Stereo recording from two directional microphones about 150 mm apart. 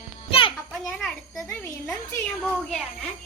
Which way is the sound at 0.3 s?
35° left (ahead or behind).